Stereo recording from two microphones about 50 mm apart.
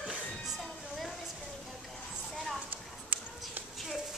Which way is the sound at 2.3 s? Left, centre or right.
Centre.